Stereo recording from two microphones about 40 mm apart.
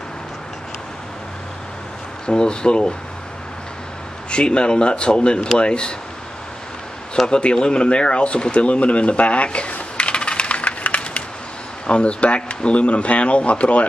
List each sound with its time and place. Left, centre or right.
2.2 s speech: left
4.3 s speech: left
7.2 s speech: left